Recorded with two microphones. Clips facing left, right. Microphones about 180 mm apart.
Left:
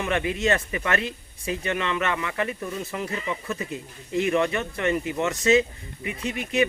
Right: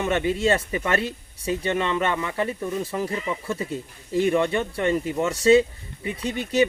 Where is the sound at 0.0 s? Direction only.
25° right (ahead or behind).